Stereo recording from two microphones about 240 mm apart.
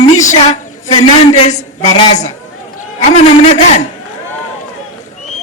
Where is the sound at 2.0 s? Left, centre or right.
Left.